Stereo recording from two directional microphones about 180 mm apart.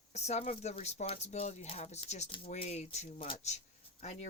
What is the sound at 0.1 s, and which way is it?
Speech, 40° left (ahead or behind).